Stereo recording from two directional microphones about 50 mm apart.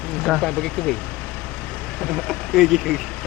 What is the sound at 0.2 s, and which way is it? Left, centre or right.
Speech, centre.